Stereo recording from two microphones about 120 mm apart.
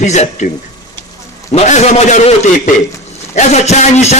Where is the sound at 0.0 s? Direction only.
70° left (ahead or behind).